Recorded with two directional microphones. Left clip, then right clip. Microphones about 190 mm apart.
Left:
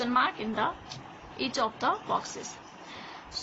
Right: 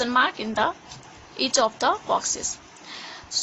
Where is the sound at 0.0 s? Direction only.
60° right (ahead or behind).